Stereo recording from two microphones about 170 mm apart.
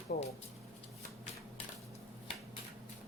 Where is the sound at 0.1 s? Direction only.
60° left (ahead or behind).